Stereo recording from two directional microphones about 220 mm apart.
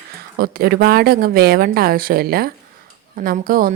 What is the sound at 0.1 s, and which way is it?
A woman's voice, 45° right (ahead or behind).